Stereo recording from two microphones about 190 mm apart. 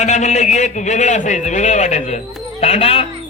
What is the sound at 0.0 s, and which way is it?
A man's voice, 40° left (ahead or behind).